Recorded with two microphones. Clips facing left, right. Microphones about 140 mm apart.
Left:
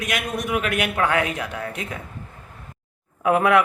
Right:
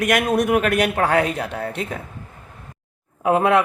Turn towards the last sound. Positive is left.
turn(degrees=-25)  # may be behind; listen again after turning